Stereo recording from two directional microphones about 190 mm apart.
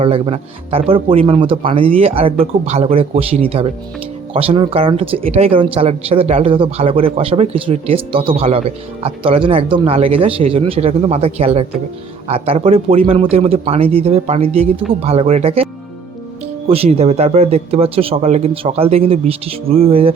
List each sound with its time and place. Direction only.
0.0 s speech: 30° right (ahead or behind)
16.6 s speech: 30° right (ahead or behind)